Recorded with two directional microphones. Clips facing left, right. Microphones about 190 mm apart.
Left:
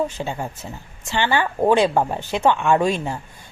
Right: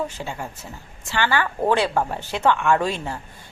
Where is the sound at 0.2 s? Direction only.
20° left (ahead or behind).